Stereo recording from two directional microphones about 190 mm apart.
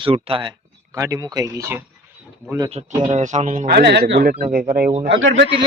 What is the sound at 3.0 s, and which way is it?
Speech, 40° right (ahead or behind).